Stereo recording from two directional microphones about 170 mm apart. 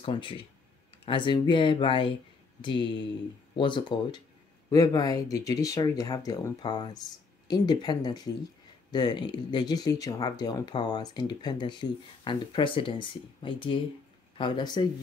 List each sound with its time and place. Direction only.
0.0 s speech: 30° left (ahead or behind)